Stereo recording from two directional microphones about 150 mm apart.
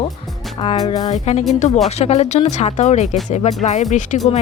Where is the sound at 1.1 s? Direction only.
45° left (ahead or behind).